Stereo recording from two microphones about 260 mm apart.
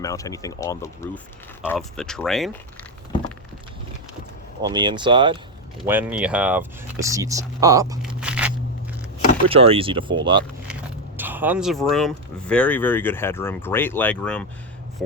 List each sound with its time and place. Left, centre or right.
0.0 s speech: centre
4.6 s speech: centre
5.8 s speech: centre
8.0 s crunch: centre
9.5 s speech: right
11.2 s speech: centre